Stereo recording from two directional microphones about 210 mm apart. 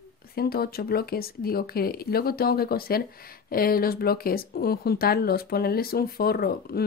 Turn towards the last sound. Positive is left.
turn(degrees=45)  # may be behind; listen again after turning